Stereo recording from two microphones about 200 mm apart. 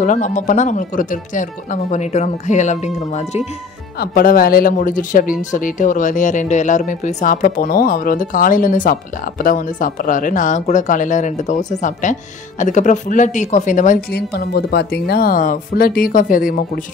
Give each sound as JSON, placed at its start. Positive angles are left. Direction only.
{"t": 0.0, "sound": "speech", "side_deg": 40}
{"t": 4.0, "sound": "speech", "side_deg": 50}